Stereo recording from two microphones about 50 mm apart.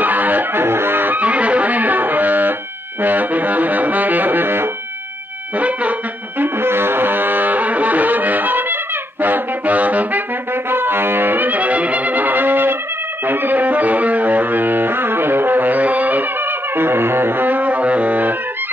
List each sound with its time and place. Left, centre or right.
0.0 s music: right
5.6 s music: right
6.4 s music: right
9.2 s saxophone: right
10.5 s brass instrument: right
13.2 s music: right